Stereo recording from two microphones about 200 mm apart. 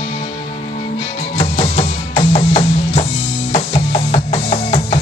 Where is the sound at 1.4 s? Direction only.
30° left (ahead or behind).